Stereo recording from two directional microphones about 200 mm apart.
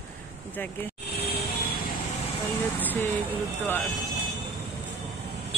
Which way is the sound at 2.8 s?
10° left (ahead or behind).